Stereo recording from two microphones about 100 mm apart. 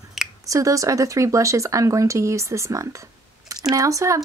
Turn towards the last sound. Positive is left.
turn(degrees=-35)  # may be behind; listen again after turning